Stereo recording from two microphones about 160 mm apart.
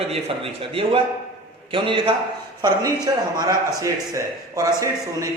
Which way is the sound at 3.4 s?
20° right (ahead or behind).